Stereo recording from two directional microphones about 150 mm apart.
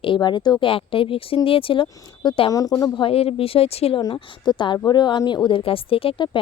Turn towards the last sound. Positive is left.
turn(degrees=35)  # may be behind; listen again after turning